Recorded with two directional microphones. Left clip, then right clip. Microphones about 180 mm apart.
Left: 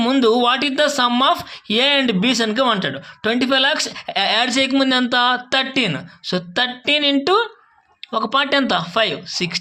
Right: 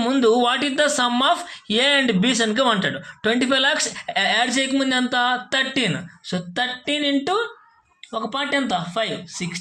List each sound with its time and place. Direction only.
0.0 s speech: 15° left (ahead or behind)
6.3 s a sound: 30° left (ahead or behind)
8.1 s speech: 35° left (ahead or behind)